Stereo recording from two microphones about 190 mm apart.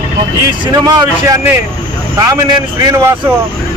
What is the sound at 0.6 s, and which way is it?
Speech, 20° right (ahead or behind).